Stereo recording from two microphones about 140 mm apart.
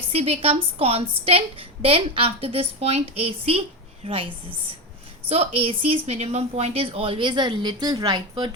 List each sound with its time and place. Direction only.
0.1 s a woman's voice: 45° right (ahead or behind)
5.3 s speech: 45° right (ahead or behind)